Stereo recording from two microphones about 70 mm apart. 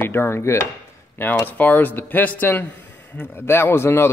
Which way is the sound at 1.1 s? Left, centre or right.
Left.